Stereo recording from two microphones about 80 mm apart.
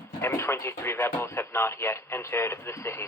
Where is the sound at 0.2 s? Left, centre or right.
Left.